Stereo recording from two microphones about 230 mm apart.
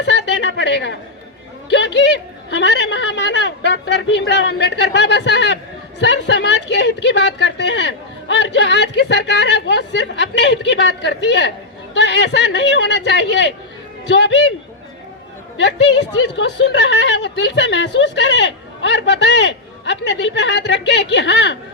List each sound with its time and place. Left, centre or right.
0.0 s a sound: left
1.7 s a woman's voice: left
15.5 s a woman's voice: left